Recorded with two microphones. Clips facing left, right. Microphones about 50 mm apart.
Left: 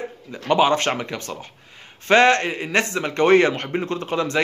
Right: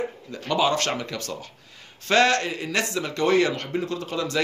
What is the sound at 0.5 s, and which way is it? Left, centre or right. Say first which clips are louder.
A man's voice: left 5 dB; left.